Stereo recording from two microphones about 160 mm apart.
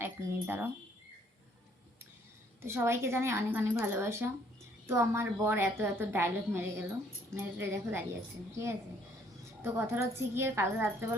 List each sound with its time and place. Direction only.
0.0 s speech: 15° right (ahead or behind)
2.6 s a woman's voice: 15° right (ahead or behind)
9.6 s a woman's voice: 15° right (ahead or behind)